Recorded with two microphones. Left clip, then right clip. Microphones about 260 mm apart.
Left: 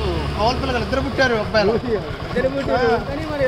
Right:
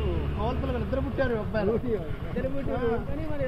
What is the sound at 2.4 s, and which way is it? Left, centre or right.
Speech, left.